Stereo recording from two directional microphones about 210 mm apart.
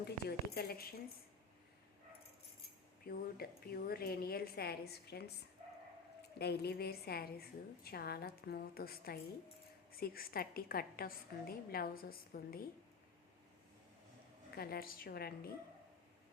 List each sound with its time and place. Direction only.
0.3 s a woman's voice: 45° left (ahead or behind)
3.1 s a woman's voice: 45° left (ahead or behind)
6.4 s a woman's voice: 50° left (ahead or behind)
14.5 s a woman's voice: 45° left (ahead or behind)